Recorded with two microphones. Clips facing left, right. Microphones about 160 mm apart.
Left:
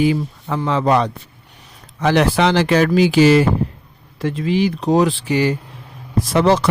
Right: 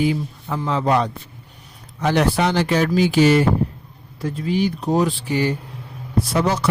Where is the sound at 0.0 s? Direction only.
90° left.